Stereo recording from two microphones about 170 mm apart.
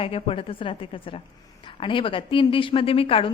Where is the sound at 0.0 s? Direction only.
35° left (ahead or behind).